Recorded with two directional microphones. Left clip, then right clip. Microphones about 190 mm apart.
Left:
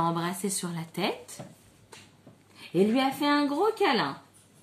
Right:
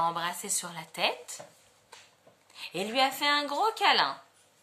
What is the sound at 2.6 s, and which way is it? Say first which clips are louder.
Speech: left 2 dB; 20° right (ahead or behind).